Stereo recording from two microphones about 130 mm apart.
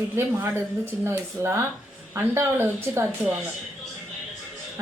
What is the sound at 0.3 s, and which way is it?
Speech, 20° right (ahead or behind).